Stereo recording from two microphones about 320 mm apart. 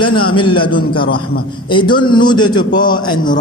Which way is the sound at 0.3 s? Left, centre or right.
Centre.